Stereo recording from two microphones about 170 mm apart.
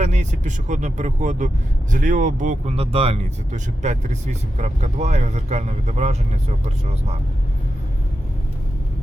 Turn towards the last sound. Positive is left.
turn(degrees=-40)  # may be behind; listen again after turning